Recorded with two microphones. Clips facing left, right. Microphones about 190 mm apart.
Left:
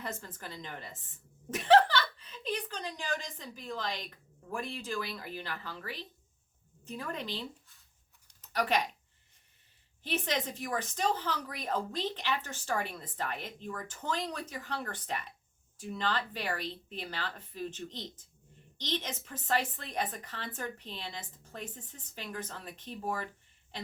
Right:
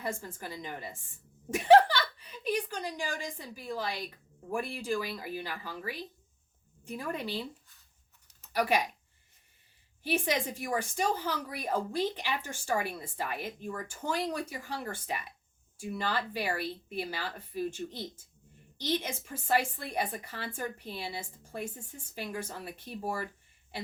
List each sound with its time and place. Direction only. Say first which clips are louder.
0.0 s a woman's voice: right 4 dB; 10° right (ahead or behind)
8.3 s a sound: right 2 dB; 10° right (ahead or behind)
10.0 s speech: right 3 dB; 10° right (ahead or behind)